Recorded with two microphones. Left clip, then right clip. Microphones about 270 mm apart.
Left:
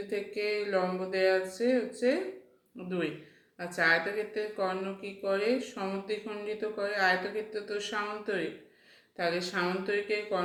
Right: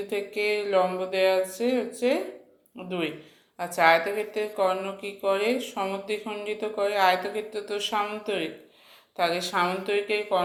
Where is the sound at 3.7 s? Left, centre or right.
Right.